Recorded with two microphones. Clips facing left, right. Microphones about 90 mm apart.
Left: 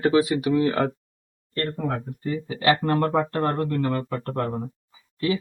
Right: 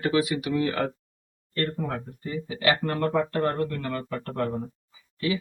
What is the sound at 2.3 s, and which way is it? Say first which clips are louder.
Speech: left 3 dB; 35° left (ahead or behind).